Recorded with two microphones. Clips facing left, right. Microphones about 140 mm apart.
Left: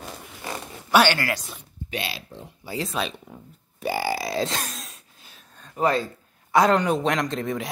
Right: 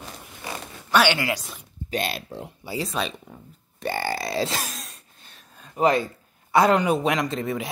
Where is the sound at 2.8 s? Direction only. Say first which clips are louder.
Even; centre (ahead or behind).